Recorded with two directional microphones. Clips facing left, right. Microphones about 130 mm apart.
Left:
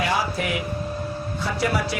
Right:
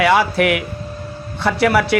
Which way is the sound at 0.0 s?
70° right (ahead or behind).